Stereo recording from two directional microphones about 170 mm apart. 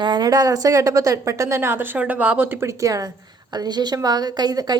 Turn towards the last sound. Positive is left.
turn(degrees=-25)  # may be behind; listen again after turning